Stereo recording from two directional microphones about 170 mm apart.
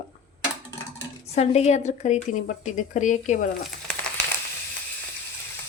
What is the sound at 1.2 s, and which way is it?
A woman's voice, 40° left (ahead or behind).